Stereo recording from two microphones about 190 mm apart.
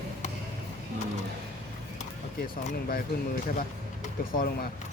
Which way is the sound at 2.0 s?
45° left (ahead or behind).